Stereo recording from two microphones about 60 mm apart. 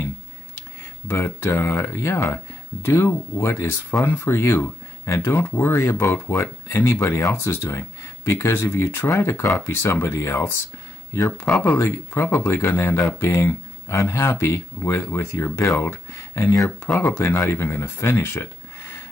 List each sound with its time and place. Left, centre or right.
1.0 s speech: left
11.6 s speech: left